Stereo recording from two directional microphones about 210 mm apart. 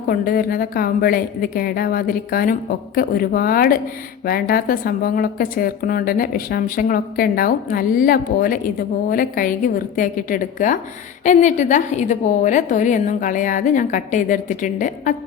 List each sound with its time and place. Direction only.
0.1 s a woman's voice: 45° left (ahead or behind)